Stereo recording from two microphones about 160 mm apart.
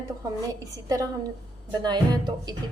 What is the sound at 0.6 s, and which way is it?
A woman's voice, 20° right (ahead or behind).